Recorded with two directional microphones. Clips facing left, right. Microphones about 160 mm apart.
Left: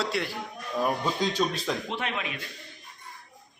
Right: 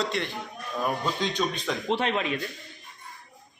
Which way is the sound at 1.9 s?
35° right (ahead or behind).